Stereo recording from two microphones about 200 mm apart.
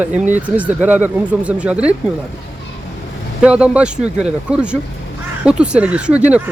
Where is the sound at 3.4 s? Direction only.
5° right (ahead or behind).